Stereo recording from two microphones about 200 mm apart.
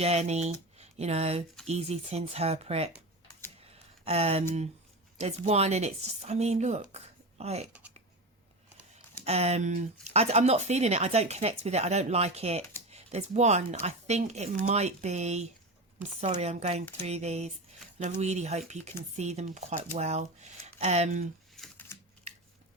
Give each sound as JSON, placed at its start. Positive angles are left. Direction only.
{"t": 0.0, "sound": "speech", "side_deg": -30}
{"t": 3.7, "sound": "a sound", "side_deg": -30}
{"t": 5.1, "sound": "speech", "side_deg": -30}
{"t": 7.7, "sound": "a sound", "side_deg": -5}
{"t": 9.2, "sound": "speech", "side_deg": -30}
{"t": 21.5, "sound": "typing", "side_deg": 0}